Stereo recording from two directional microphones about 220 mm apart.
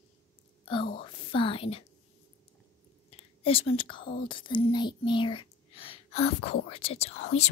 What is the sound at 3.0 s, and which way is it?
Whispering, 25° left (ahead or behind).